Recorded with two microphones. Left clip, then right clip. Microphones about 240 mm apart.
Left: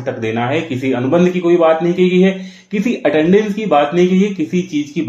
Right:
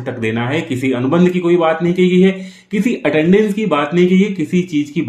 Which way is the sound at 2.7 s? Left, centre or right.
Right.